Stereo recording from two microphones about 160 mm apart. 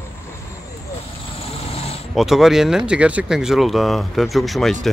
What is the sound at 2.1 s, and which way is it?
Speech, centre (ahead or behind).